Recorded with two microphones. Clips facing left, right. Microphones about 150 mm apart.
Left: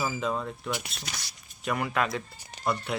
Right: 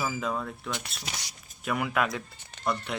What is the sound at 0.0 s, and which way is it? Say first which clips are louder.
Speech: left 1 dB; centre (ahead or behind).